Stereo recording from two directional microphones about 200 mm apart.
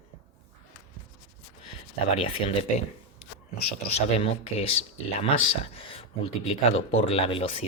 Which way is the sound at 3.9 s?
30° left (ahead or behind).